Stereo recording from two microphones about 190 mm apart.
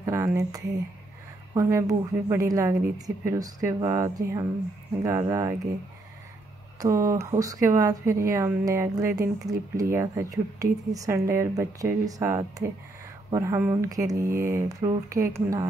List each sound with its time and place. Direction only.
0.0 s speech: 15° right (ahead or behind)
6.8 s speech: 15° right (ahead or behind)